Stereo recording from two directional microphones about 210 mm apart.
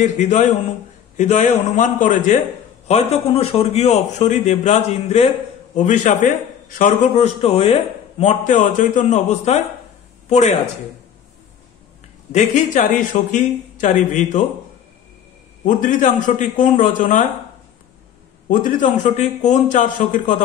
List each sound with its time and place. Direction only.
0.0 s a man's voice: 35° left (ahead or behind)
12.3 s a man's voice: 35° left (ahead or behind)
15.6 s a man's voice: 40° left (ahead or behind)
18.5 s a man's voice: 40° left (ahead or behind)